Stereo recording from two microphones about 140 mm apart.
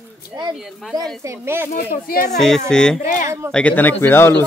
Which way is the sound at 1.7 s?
90° left.